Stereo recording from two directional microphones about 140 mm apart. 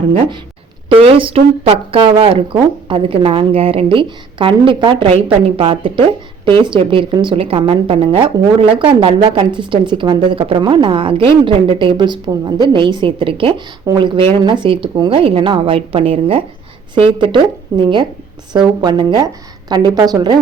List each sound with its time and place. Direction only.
0.9 s a woman's voice: 40° right (ahead or behind)